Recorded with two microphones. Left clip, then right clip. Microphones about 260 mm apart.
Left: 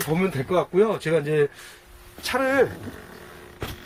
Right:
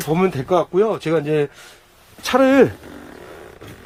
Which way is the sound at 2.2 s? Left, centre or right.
Right.